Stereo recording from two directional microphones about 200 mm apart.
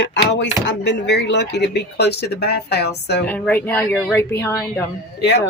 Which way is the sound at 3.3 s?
5° left (ahead or behind).